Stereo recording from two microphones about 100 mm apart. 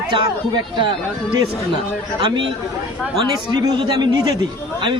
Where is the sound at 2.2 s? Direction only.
55° right (ahead or behind).